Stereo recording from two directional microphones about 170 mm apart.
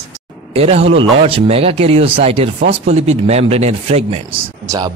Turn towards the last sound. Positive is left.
turn(degrees=-20)  # may be behind; listen again after turning